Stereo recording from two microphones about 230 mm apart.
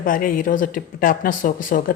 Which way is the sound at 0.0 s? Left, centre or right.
Left.